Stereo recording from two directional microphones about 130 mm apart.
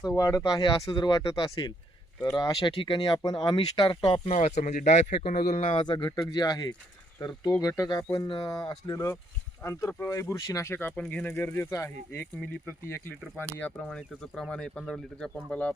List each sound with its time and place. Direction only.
0.2 s speech: 25° left (ahead or behind); by 5.8 s 50° left (ahead or behind)
5.8 s speech: 35° left (ahead or behind); by 15.7 s 10° left (ahead or behind)